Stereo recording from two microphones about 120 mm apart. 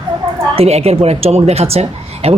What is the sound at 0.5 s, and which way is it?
Speech, 60° right (ahead or behind).